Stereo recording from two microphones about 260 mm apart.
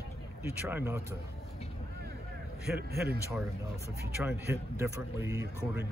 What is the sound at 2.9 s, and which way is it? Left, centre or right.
Speech, right.